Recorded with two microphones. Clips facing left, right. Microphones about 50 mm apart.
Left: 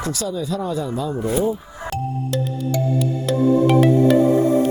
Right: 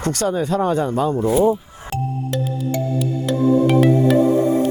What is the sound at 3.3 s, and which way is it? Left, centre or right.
Music, centre.